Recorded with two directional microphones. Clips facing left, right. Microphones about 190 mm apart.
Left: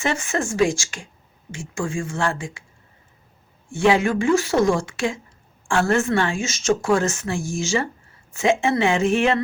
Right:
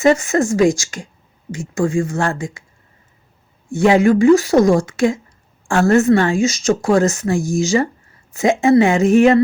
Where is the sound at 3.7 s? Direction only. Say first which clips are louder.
Right 6 dB; 40° right (ahead or behind).